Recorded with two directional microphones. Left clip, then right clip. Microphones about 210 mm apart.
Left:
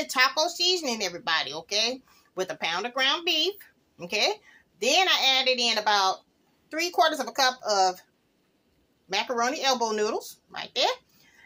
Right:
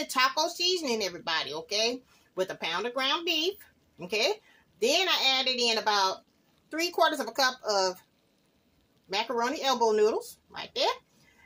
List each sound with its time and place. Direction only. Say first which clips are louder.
0.0 s speech: left 3 dB; centre (ahead or behind)
9.1 s speech: left 3 dB; centre (ahead or behind)